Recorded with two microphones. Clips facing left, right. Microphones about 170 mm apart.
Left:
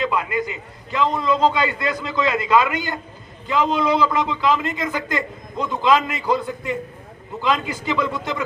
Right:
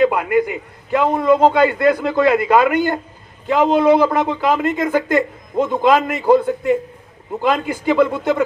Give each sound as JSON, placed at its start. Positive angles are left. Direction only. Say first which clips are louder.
{"t": 0.0, "sound": "a man's voice", "louder": "right 8 dB", "side_deg": -55}